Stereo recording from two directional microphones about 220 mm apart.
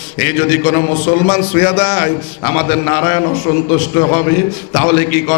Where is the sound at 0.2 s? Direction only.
10° left (ahead or behind).